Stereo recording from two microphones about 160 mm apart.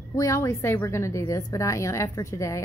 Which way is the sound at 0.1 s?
20° left (ahead or behind).